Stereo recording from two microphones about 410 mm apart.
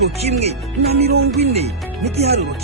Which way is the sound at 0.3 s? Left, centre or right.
Centre.